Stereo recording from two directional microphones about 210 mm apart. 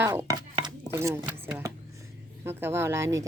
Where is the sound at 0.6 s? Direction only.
15° right (ahead or behind).